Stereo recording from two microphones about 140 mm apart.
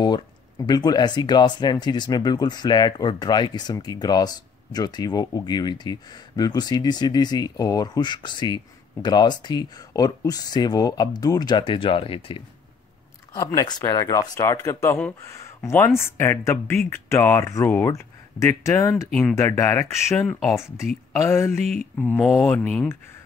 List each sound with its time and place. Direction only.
0.0 s speech: 30° left (ahead or behind)
13.3 s speech: 25° left (ahead or behind)
21.5 s mantra: 55° right (ahead or behind)
21.9 s speech: 15° left (ahead or behind)
22.2 s speech: 5° left (ahead or behind)